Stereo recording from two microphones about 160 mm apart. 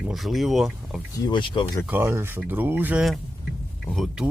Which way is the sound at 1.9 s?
15° right (ahead or behind).